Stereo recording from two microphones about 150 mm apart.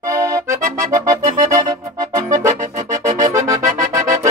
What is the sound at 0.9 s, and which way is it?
Music, 20° right (ahead or behind).